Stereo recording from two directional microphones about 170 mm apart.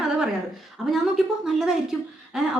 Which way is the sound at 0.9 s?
Centre (ahead or behind).